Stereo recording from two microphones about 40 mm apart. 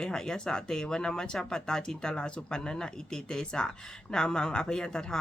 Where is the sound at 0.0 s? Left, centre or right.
Centre.